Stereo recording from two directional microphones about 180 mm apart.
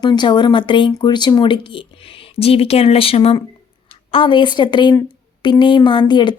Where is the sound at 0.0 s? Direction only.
25° left (ahead or behind).